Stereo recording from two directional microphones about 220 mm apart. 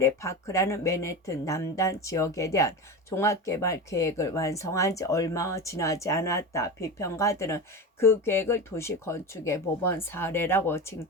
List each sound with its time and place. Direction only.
0.0 s speech: 15° left (ahead or behind)